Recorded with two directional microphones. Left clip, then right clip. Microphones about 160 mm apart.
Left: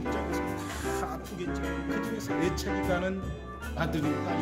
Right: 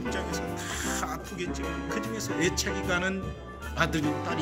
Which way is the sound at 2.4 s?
20° left (ahead or behind).